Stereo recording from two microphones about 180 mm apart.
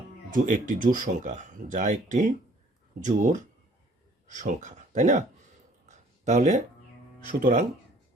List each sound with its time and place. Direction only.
0.3 s speech: 50° right (ahead or behind)
5.9 s a sound: 40° right (ahead or behind)
7.3 s speech: 45° right (ahead or behind)